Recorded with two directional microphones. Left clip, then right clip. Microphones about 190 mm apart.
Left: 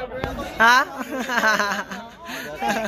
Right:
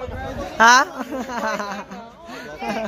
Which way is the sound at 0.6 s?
30° right (ahead or behind).